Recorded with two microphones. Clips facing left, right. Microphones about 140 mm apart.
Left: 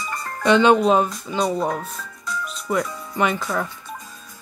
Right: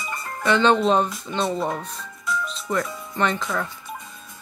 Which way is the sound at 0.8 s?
5° left (ahead or behind).